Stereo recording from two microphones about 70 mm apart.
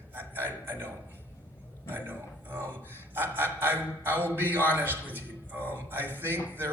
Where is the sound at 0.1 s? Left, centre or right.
Right.